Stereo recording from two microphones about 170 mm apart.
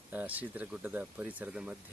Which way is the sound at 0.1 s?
10° right (ahead or behind).